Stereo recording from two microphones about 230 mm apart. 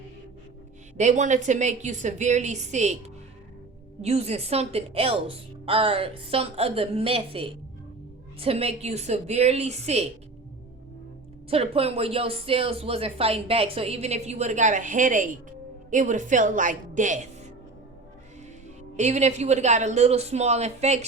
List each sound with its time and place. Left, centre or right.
0.9 s a woman's voice: right
4.0 s speech: right
11.5 s a woman's voice: right
18.9 s speech: right